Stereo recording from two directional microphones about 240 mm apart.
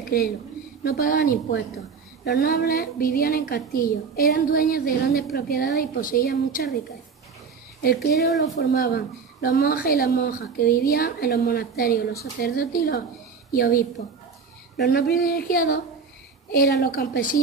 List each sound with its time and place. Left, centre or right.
0.8 s a woman's voice: left
7.8 s a woman's voice: left